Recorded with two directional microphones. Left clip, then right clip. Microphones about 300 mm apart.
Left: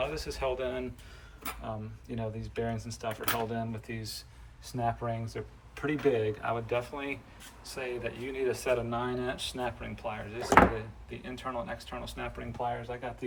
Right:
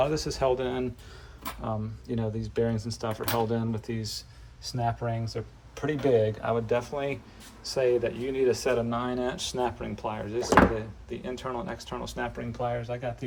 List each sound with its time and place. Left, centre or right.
0.1 s speech: centre